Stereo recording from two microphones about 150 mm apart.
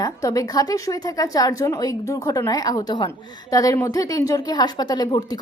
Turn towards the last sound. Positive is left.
turn(degrees=25)  # may be behind; listen again after turning